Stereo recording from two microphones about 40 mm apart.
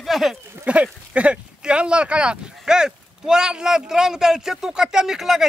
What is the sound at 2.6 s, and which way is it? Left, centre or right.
A man's voice, centre.